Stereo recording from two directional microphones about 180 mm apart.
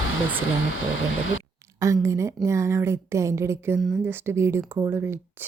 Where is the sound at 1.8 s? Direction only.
15° right (ahead or behind).